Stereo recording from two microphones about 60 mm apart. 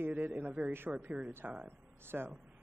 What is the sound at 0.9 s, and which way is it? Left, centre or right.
Speech, centre.